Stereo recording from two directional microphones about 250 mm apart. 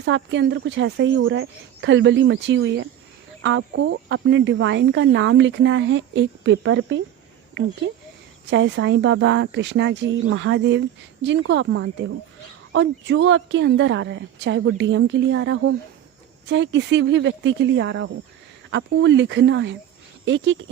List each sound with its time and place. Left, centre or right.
0.0 s speech: right
8.4 s speech: right